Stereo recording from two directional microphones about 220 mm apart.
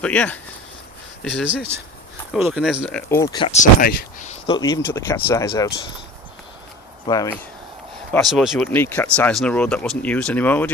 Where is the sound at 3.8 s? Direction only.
40° left (ahead or behind).